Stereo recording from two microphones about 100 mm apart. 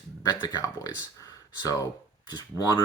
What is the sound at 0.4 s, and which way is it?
Speech, 40° left (ahead or behind).